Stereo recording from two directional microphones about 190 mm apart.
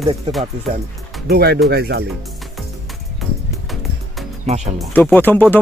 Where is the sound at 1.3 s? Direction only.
55° right (ahead or behind).